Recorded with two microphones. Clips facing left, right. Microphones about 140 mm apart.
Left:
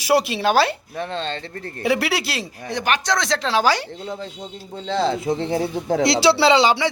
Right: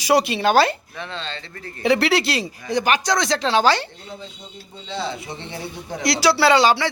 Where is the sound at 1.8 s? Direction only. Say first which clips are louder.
Right 3 dB; 5° left (ahead or behind).